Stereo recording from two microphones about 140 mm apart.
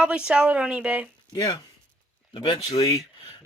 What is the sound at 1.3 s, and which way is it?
Speech, 30° left (ahead or behind).